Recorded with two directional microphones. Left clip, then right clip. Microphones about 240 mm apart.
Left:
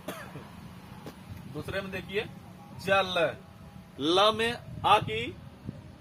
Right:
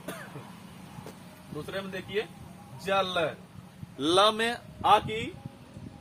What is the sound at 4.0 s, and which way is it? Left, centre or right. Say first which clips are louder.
Speech: right 1 dB; centre.